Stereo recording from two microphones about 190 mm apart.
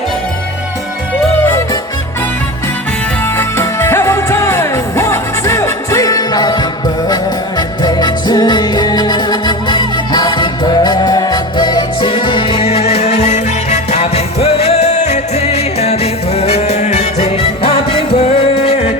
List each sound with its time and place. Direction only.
1.5 s music: 15° left (ahead or behind)
3.3 s music: 15° left (ahead or behind); by 18.9 s 30° left (ahead or behind)